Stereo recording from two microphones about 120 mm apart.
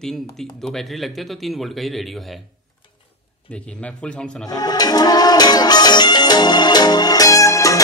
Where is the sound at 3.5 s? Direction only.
10° left (ahead or behind).